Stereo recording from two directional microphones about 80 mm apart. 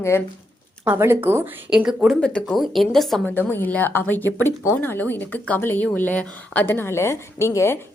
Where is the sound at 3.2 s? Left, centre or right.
Left.